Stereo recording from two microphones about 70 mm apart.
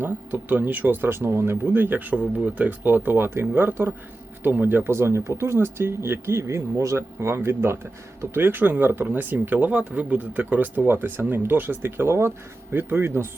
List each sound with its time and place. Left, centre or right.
0.0 s speech: right